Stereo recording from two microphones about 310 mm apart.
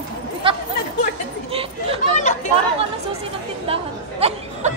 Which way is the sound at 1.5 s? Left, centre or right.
Centre.